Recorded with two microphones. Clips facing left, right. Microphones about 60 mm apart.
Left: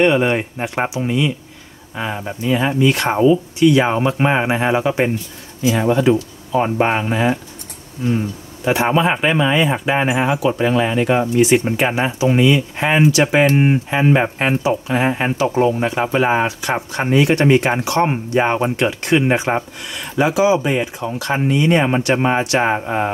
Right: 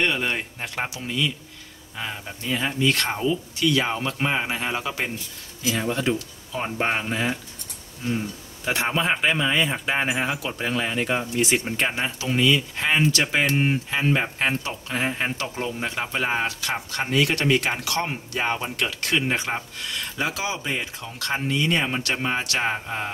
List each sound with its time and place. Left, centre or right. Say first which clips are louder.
0.0 s speech: left 10 dB; left
8.6 s speech: left 8 dB; centre
12.1 s speech: left 7 dB; left